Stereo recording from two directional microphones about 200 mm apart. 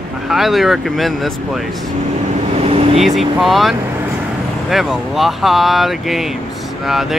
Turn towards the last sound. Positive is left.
turn(degrees=0)  # may be behind; listen again after turning